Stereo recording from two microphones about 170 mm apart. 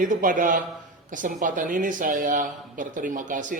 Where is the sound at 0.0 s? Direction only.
50° right (ahead or behind).